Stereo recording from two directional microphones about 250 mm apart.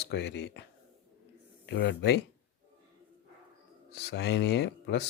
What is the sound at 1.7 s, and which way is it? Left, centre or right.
Speech, left.